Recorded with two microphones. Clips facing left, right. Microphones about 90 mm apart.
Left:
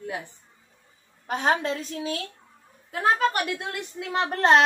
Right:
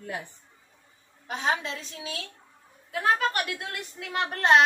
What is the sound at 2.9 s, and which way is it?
A woman's voice, 35° left (ahead or behind).